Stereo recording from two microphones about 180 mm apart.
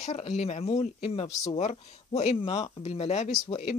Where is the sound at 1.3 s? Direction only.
20° left (ahead or behind).